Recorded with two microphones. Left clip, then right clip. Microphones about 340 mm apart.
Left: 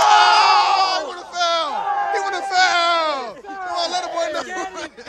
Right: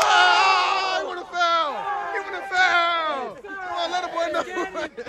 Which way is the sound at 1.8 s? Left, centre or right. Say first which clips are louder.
Left 6 dB; left.